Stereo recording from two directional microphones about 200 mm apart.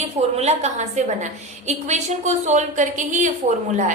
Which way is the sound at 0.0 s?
30° right (ahead or behind).